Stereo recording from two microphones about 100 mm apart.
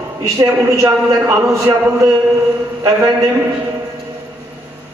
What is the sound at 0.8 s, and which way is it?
A man's voice, 30° right (ahead or behind).